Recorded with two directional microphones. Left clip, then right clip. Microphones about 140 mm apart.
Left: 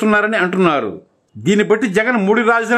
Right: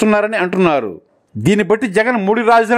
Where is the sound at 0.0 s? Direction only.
40° right (ahead or behind).